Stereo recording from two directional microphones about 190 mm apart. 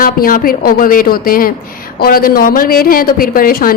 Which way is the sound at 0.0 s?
50° left (ahead or behind).